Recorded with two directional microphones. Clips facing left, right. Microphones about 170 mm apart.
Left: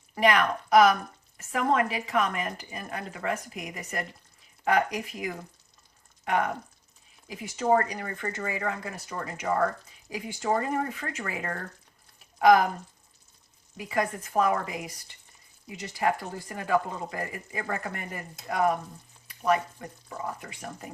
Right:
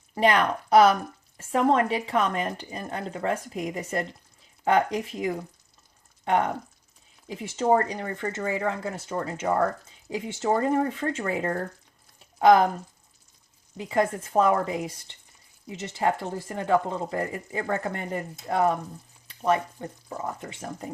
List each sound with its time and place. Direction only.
0.1 s speech: 30° right (ahead or behind)
13.7 s speech: 25° right (ahead or behind)